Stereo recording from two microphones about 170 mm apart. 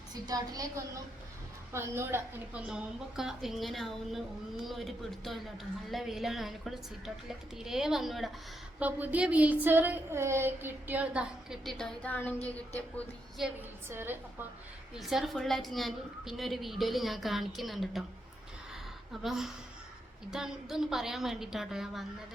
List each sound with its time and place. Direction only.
0.1 s a woman's voice: 20° right (ahead or behind); by 12.4 s 10° left (ahead or behind)
13.4 s speech: 10° right (ahead or behind)
14.9 s a woman's voice: centre (ahead or behind)
19.2 s a woman's voice: centre (ahead or behind)